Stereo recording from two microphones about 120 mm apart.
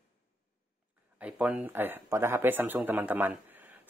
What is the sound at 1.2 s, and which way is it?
Speech, 10° right (ahead or behind).